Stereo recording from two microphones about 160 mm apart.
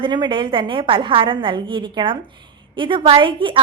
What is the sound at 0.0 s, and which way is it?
A woman's voice, 30° right (ahead or behind).